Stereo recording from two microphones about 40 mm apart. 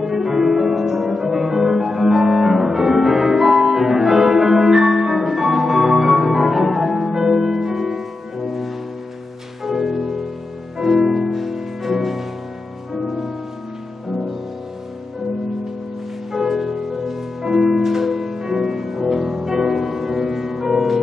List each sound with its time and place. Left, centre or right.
0.0 s music: centre
16.3 s music: centre